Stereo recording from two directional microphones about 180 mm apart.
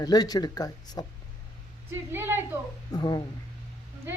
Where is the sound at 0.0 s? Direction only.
20° left (ahead or behind).